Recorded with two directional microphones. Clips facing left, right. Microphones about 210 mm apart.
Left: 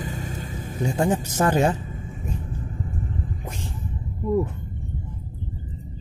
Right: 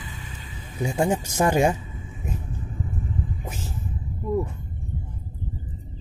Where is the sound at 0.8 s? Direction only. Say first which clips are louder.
Left 1 dB; 10° right (ahead or behind).